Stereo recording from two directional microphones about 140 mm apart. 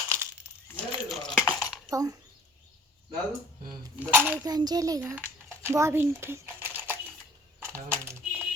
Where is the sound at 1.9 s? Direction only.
25° right (ahead or behind).